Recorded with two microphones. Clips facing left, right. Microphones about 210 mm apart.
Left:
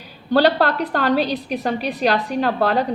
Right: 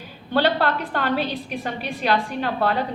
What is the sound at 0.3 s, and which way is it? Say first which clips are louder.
A woman's voice: left 4 dB; 40° left (ahead or behind).